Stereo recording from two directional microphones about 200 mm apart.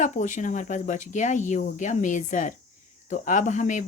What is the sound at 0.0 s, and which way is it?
A woman's voice, 40° left (ahead or behind).